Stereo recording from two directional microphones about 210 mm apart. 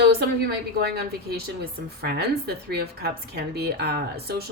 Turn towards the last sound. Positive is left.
turn(degrees=-50)  # may be behind; listen again after turning